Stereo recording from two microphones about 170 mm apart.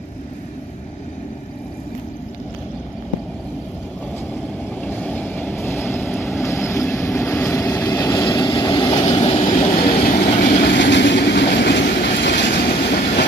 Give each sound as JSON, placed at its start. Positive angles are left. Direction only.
{"t": 4.8, "sound": "vehicle", "side_deg": 10}
{"t": 9.4, "sound": "vehicle", "side_deg": 40}
{"t": 10.6, "sound": "vehicle", "side_deg": 90}